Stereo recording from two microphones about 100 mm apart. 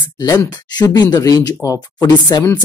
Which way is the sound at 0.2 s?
40° left (ahead or behind).